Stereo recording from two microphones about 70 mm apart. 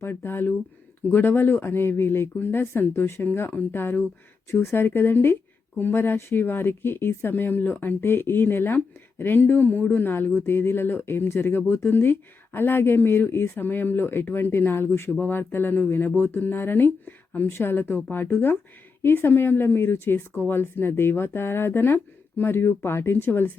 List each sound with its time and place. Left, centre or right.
0.0 s speech: left